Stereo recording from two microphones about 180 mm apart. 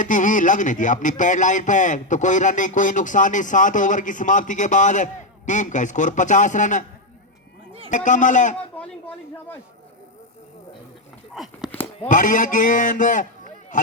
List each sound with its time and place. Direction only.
0.0 s speech: 45° left (ahead or behind)
7.9 s speech: 45° left (ahead or behind)
8.7 s speech: 10° left (ahead or behind)
11.3 s a sound: centre (ahead or behind)
12.0 s speech: 45° left (ahead or behind)